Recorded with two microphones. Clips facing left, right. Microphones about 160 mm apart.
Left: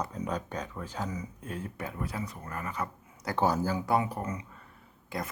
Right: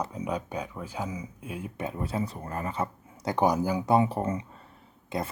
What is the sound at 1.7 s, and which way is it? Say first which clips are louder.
Speech: right 9 dB; 25° right (ahead or behind).